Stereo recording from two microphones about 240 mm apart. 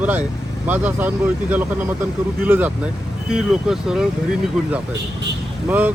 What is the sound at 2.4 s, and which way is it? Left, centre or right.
Speech, centre.